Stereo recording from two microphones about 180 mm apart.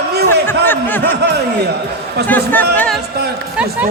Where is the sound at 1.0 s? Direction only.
70° right (ahead or behind).